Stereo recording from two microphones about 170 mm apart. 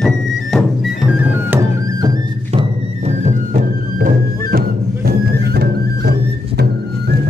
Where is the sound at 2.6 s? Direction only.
40° right (ahead or behind).